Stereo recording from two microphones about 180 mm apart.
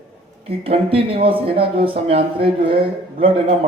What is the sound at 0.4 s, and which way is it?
Speech, 30° right (ahead or behind).